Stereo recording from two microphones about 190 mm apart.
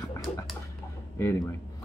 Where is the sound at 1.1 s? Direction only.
15° left (ahead or behind).